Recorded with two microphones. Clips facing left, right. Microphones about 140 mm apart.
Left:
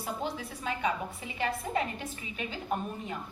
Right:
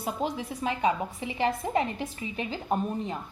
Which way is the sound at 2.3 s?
30° right (ahead or behind).